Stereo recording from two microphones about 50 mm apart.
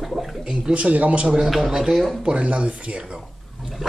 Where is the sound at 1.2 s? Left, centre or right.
Centre.